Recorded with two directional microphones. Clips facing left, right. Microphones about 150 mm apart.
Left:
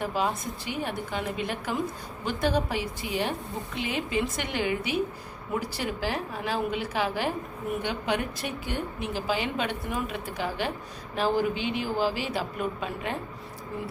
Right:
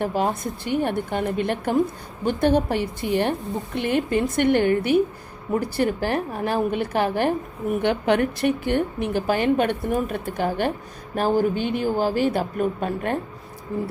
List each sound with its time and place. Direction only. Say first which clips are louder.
0.0 s a woman's voice: right 5 dB; 50° right (ahead or behind)